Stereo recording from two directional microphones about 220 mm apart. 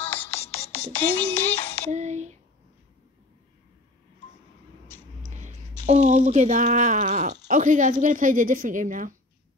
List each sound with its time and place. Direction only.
0.0 s music: 10° left (ahead or behind)
1.4 s music: 30° left (ahead or behind)
1.9 s a sound: 30° right (ahead or behind)
5.9 s speech: 30° right (ahead or behind)